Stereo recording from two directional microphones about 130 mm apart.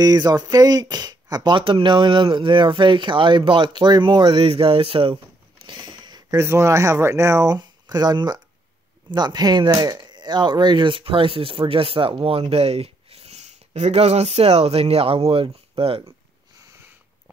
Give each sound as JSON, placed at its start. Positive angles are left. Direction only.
{"t": 0.0, "sound": "speech", "side_deg": -30}
{"t": 5.7, "sound": "a sound", "side_deg": -35}
{"t": 6.4, "sound": "speech", "side_deg": -20}